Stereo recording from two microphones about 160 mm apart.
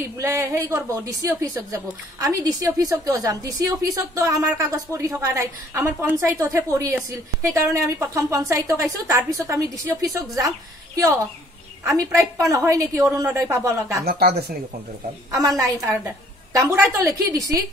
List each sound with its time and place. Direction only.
0.2 s a woman's voice: 15° right (ahead or behind)
11.8 s a woman's voice: 20° right (ahead or behind)
14.0 s speech: 75° right (ahead or behind)
15.3 s a woman's voice: 20° right (ahead or behind)